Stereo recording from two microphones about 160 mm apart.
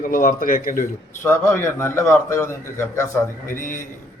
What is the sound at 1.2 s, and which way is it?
A man's voice, 15° left (ahead or behind).